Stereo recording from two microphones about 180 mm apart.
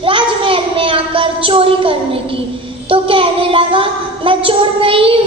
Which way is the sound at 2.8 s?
30° right (ahead or behind).